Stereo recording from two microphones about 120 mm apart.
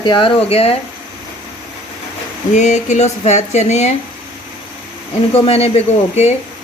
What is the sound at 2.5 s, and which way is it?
Speech, 75° left (ahead or behind).